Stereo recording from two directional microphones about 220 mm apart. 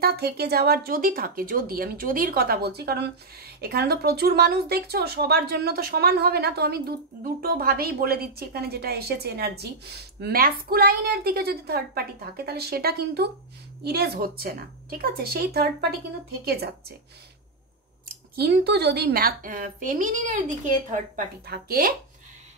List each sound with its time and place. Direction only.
0.0 s speech: 45° right (ahead or behind)
18.3 s a woman's voice: 45° right (ahead or behind)